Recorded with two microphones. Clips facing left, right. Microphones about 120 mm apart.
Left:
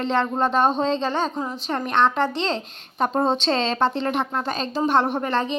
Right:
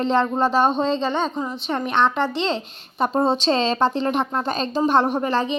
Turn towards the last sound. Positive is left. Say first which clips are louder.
# right 2 dB
turn(degrees=-10)  # may be behind; listen again after turning